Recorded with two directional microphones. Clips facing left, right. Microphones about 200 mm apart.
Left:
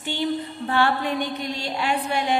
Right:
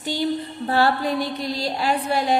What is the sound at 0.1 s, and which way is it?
A woman's voice, 40° right (ahead or behind).